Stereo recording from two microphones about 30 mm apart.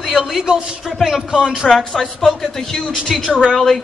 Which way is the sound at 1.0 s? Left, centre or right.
Right.